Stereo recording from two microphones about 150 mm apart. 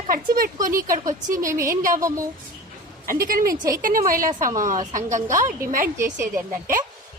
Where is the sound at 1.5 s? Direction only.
20° right (ahead or behind).